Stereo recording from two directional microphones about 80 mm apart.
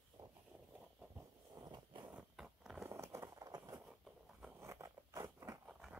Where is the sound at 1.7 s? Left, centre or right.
Right.